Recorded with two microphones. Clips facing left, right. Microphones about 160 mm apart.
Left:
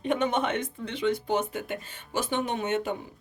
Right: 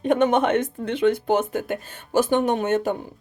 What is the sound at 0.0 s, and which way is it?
Speech, 45° right (ahead or behind).